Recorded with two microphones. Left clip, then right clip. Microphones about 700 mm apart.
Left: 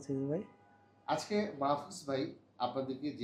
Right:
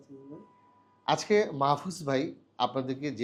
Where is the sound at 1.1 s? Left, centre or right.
Right.